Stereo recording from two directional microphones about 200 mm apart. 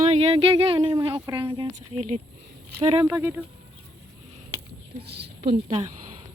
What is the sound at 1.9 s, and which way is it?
Speech, 35° right (ahead or behind).